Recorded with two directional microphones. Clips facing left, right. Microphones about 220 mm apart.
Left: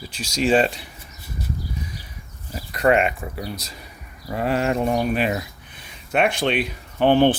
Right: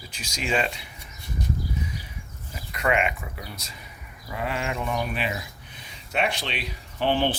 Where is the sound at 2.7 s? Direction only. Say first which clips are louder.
Left 6 dB; 40° left (ahead or behind).